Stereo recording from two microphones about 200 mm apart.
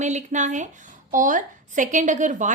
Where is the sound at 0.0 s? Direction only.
35° right (ahead or behind).